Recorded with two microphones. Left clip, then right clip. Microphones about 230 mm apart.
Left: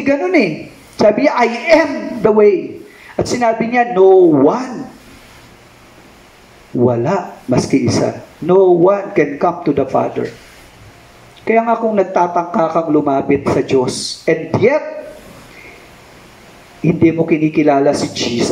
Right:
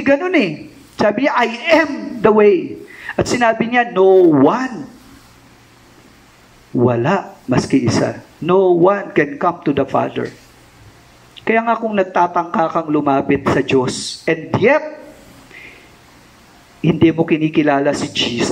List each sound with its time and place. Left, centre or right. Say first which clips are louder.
0.0 s speech: left 1 dB; right
6.8 s speech: left 1 dB; right
11.4 s speech: left 3 dB; right
16.8 s speech: left 1 dB; right